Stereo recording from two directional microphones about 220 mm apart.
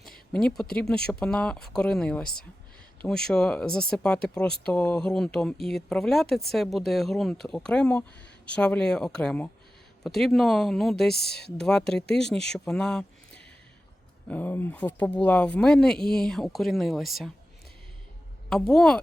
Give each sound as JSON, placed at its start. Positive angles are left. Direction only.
{"t": 0.3, "sound": "speech", "side_deg": 5}
{"t": 11.1, "sound": "speech", "side_deg": 45}
{"t": 11.6, "sound": "speech", "side_deg": 0}
{"t": 18.4, "sound": "speech", "side_deg": 0}